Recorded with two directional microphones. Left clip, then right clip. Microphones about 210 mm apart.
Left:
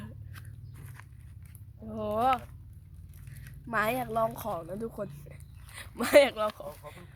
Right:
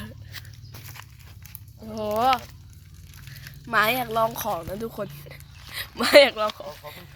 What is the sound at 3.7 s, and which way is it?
Speech, 10° left (ahead or behind).